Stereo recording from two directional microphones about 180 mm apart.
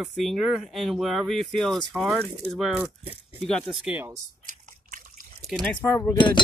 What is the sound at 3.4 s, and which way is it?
Speech, 5° left (ahead or behind).